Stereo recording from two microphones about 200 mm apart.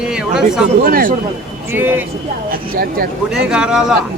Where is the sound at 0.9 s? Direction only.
45° right (ahead or behind).